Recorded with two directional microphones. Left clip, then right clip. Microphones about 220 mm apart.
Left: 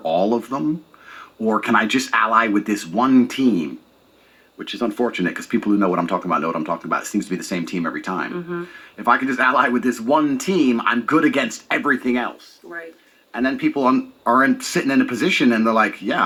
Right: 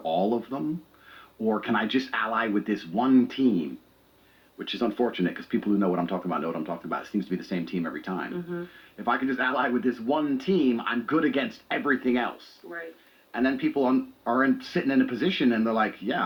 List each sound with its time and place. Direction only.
0.0 s speech: 45° left (ahead or behind)
4.5 s speech: 45° left (ahead or behind)
12.7 s speech: 60° left (ahead or behind)
13.3 s speech: 45° left (ahead or behind)